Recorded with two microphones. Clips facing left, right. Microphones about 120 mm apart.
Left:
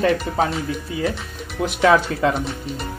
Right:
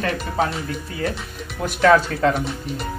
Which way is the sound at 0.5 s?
Centre (ahead or behind).